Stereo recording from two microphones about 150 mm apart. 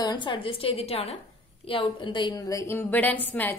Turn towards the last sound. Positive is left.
turn(degrees=10)  # may be behind; listen again after turning